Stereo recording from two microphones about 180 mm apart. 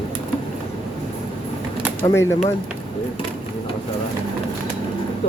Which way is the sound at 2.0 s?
15° left (ahead or behind).